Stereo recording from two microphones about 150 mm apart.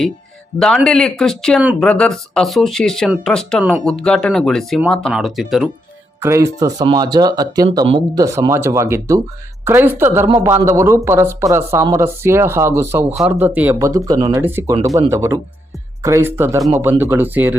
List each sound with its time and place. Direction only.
0.9 s speech: 5° left (ahead or behind)
6.1 s speech: 15° right (ahead or behind)